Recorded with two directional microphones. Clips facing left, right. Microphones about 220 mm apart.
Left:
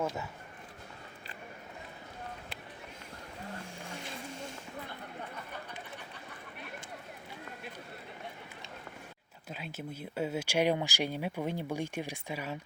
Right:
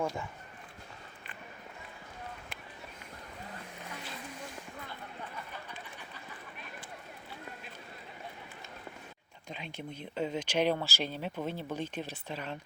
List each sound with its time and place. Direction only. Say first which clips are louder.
0.0 s speech: even; 5° left (ahead or behind)
3.5 s boat: left 3 dB; 30° left (ahead or behind)
9.5 s speech: left 1 dB; 5° left (ahead or behind)